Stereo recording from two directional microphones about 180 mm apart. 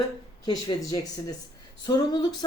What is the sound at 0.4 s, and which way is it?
Speech, 25° left (ahead or behind).